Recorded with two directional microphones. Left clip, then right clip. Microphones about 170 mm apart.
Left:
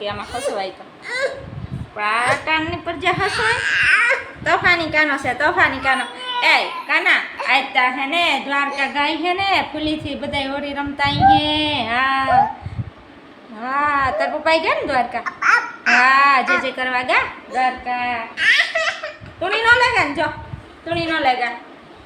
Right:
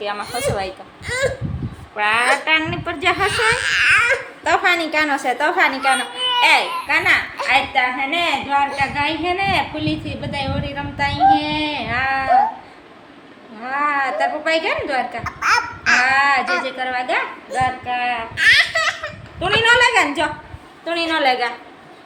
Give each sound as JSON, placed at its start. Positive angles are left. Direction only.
{"t": 0.0, "sound": "a woman's voice", "side_deg": -10}
{"t": 13.6, "sound": "a woman's voice", "side_deg": 15}
{"t": 15.2, "sound": "babbling", "side_deg": 0}
{"t": 16.0, "sound": "a woman's voice", "side_deg": 15}
{"t": 17.8, "sound": "a child's voice", "side_deg": 0}